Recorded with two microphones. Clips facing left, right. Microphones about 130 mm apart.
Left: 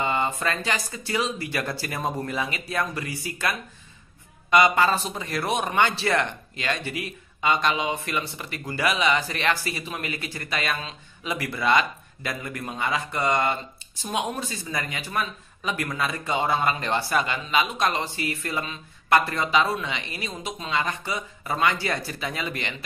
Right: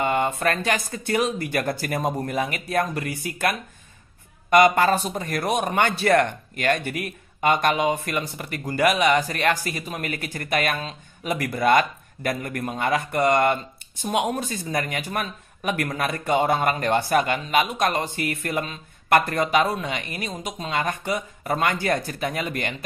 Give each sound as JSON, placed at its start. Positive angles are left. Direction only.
{"t": 0.0, "sound": "speech", "side_deg": -55}